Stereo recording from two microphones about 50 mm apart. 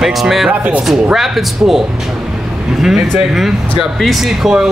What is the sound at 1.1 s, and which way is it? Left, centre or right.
A man's voice, centre.